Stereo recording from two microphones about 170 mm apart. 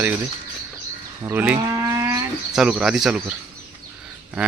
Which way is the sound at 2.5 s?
5° right (ahead or behind).